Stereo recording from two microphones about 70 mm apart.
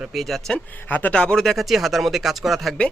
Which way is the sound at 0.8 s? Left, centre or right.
Left.